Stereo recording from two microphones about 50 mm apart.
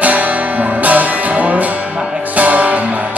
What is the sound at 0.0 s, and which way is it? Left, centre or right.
Music, right.